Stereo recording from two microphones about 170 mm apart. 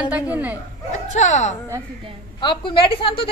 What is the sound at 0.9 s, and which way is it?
Speech, 45° left (ahead or behind).